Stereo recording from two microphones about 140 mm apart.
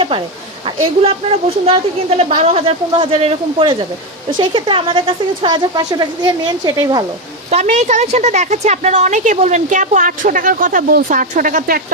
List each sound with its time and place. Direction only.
0.8 s a woman's voice: 45° right (ahead or behind); by 7.0 s 25° right (ahead or behind)
7.5 s a woman's voice: 55° right (ahead or behind); by 11.8 s 75° right (ahead or behind)